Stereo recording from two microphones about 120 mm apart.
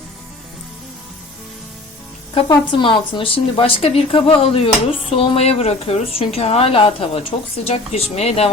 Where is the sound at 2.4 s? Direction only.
40° left (ahead or behind).